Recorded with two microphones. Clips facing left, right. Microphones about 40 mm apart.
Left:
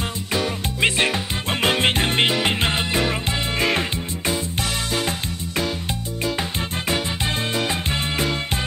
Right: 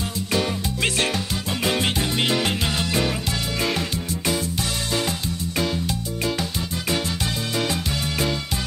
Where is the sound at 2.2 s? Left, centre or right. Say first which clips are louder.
Left 2 dB; left.